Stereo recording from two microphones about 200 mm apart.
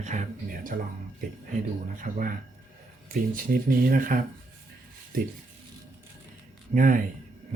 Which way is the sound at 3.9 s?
45° right (ahead or behind).